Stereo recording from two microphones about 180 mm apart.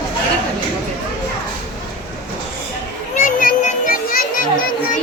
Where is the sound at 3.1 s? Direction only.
50° left (ahead or behind).